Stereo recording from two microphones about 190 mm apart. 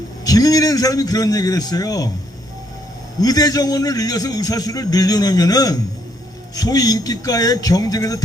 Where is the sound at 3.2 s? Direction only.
20° left (ahead or behind).